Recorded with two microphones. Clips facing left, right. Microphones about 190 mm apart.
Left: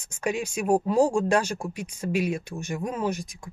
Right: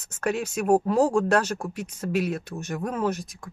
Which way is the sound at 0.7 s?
5° right (ahead or behind).